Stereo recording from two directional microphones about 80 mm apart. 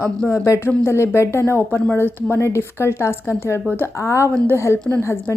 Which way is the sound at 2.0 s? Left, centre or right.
Left.